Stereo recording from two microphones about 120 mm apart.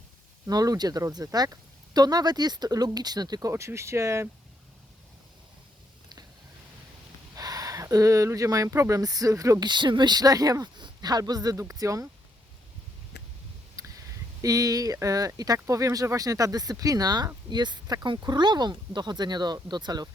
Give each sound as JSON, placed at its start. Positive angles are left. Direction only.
{"t": 0.4, "sound": "speech", "side_deg": -30}
{"t": 3.5, "sound": "speech", "side_deg": -20}
{"t": 7.3, "sound": "speech", "side_deg": -30}
{"t": 13.7, "sound": "speech", "side_deg": -25}